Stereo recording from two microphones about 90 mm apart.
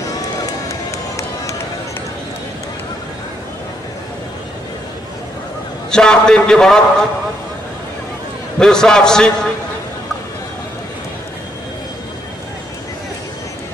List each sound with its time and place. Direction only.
0.5 s run: 35° left (ahead or behind)
5.9 s a man's voice: 5° left (ahead or behind)
8.5 s a man's voice: 5° left (ahead or behind)